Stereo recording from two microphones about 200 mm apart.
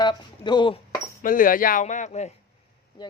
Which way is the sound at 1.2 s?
45° left (ahead or behind).